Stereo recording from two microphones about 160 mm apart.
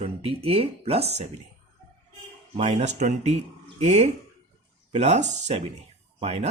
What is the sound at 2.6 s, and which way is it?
Speech, 45° right (ahead or behind).